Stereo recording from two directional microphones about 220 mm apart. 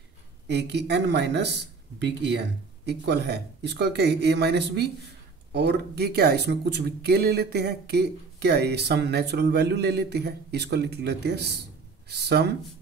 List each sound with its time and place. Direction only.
0.5 s speech: 50° right (ahead or behind)